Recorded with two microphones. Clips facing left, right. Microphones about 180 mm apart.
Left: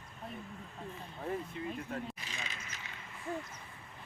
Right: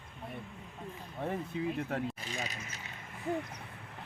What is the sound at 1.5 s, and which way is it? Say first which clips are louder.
Speech: right 5 dB; 70° right (ahead or behind).